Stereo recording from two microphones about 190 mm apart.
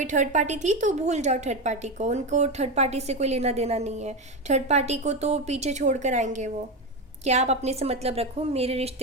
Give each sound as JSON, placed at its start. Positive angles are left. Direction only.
{"t": 0.0, "sound": "a woman's voice", "side_deg": -40}